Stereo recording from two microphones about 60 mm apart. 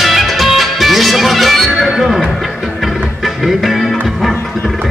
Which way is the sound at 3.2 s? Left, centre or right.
Centre.